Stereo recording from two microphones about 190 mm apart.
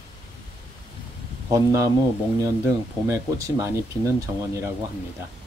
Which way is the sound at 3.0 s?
15° right (ahead or behind).